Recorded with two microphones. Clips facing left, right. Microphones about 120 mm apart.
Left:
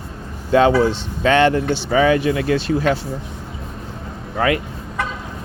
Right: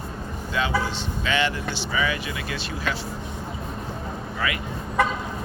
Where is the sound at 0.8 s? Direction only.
55° left (ahead or behind).